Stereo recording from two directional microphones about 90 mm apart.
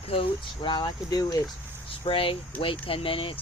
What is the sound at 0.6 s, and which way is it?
Speech, 55° left (ahead or behind).